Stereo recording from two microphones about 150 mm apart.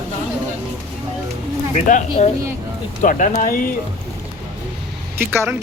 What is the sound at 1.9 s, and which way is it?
Speech, 60° left (ahead or behind).